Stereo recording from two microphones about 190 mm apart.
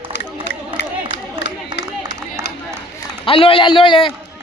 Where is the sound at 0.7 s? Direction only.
70° left (ahead or behind).